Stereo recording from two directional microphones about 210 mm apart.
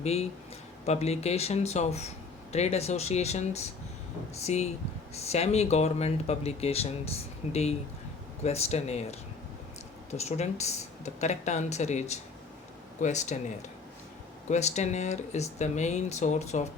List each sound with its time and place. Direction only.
0.0 s speech: 30° left (ahead or behind)
14.5 s speech: 35° left (ahead or behind)